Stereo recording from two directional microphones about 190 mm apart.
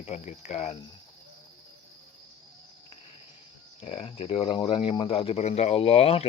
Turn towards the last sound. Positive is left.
turn(degrees=30)  # may be behind; listen again after turning